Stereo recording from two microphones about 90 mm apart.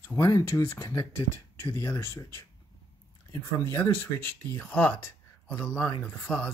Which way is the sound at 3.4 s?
30° left (ahead or behind).